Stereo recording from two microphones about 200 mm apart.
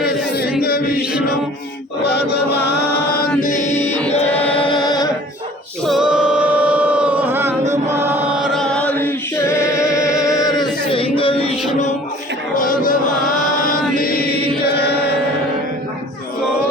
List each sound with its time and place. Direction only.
3.4 s music: 35° left (ahead or behind)
4.5 s music: 25° left (ahead or behind)
5.8 s singing: centre (ahead or behind)
7.7 s chant: 15° right (ahead or behind); by 11.5 s 25° left (ahead or behind)
12.5 s music: 45° left (ahead or behind)
13.7 s chant: 45° left (ahead or behind)